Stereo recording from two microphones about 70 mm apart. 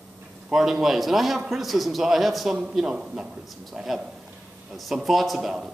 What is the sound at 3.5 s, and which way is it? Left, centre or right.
A man's voice, centre.